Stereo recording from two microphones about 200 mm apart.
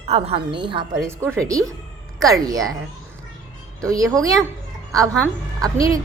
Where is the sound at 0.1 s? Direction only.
30° right (ahead or behind).